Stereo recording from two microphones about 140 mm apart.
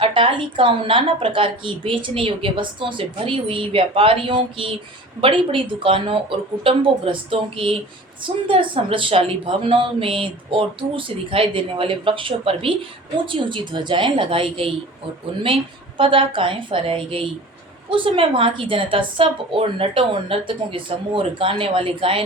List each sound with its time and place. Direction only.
0.0 s a woman's voice: 40° right (ahead or behind)
16.0 s a woman's voice: 35° right (ahead or behind)